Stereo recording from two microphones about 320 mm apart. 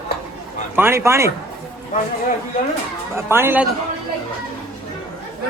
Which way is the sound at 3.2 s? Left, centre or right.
Centre.